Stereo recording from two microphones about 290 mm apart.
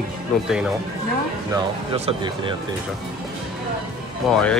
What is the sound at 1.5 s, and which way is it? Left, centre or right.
Speech, centre.